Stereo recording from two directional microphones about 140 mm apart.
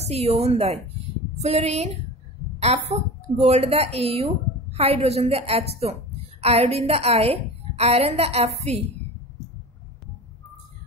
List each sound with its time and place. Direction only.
0.1 s a woman's voice: 50° right (ahead or behind)